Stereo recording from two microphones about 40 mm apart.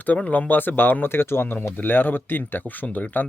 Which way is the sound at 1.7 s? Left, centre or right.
Left.